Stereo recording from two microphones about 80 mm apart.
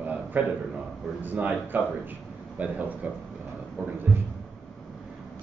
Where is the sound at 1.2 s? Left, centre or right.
Right.